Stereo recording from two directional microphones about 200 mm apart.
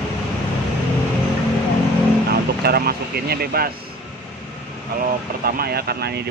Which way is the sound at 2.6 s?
50° right (ahead or behind).